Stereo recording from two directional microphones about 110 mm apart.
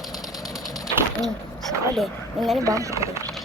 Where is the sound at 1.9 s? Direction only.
Centre (ahead or behind).